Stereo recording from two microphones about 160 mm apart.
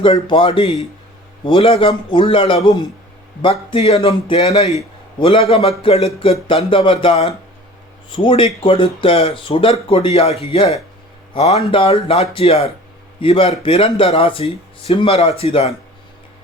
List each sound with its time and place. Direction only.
0.0 s speech: 30° left (ahead or behind)